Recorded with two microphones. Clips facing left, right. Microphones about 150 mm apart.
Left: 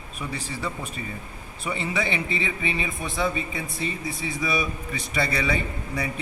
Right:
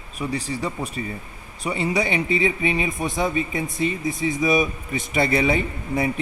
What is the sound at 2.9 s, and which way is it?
Speech, 45° right (ahead or behind).